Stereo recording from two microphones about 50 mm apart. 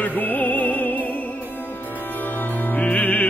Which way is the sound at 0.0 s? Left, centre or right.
Left.